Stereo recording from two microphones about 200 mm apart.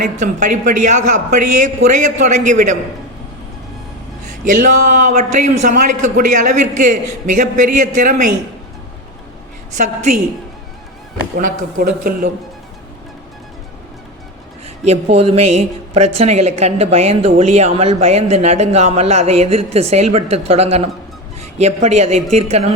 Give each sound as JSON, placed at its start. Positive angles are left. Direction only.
{"t": 0.0, "sound": "speech", "side_deg": -40}
{"t": 4.4, "sound": "speech", "side_deg": -40}
{"t": 11.3, "sound": "a man's voice", "side_deg": -45}
{"t": 14.8, "sound": "speech", "side_deg": -30}